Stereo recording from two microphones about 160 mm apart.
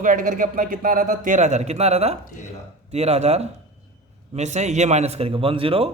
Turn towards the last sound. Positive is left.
turn(degrees=-35)  # may be behind; listen again after turning